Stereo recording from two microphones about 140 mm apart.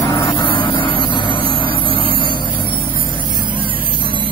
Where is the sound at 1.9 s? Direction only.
40° right (ahead or behind).